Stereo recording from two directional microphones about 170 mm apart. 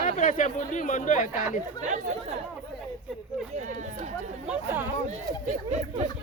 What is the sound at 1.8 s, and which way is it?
Speech, 45° right (ahead or behind).